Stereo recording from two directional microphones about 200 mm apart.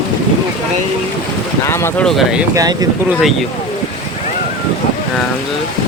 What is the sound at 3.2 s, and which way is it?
Speech, centre (ahead or behind).